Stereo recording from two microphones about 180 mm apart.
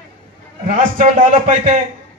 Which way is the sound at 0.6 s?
40° right (ahead or behind).